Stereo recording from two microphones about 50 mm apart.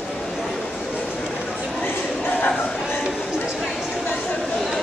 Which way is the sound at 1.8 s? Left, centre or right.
Left.